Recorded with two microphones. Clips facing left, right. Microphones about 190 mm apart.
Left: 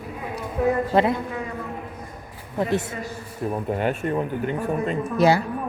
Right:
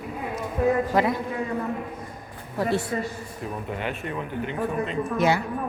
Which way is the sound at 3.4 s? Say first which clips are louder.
Left 7 dB; 45° left (ahead or behind).